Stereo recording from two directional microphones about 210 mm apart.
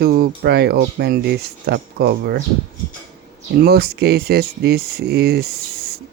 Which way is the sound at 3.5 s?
50° right (ahead or behind).